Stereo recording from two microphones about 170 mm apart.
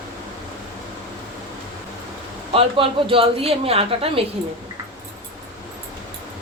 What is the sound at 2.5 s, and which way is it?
A woman's voice, 30° right (ahead or behind).